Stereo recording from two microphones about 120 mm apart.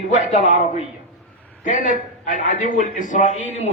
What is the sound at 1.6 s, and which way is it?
A man's voice, 90° left.